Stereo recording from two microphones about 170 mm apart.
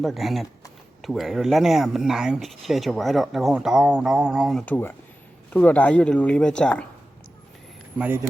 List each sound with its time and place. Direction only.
0.0 s speech: centre (ahead or behind)
4.6 s speech: 10° left (ahead or behind)
7.9 s speech: 10° right (ahead or behind)